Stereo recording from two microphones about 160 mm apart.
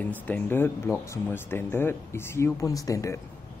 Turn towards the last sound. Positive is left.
turn(degrees=20)  # may be behind; listen again after turning